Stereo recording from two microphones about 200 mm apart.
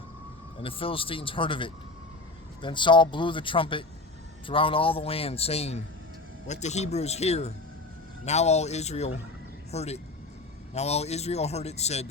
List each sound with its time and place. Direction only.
0.6 s a man's voice: 25° left (ahead or behind)